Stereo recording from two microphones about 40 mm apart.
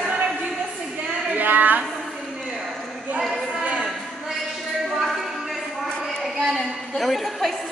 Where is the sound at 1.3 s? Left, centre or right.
Right.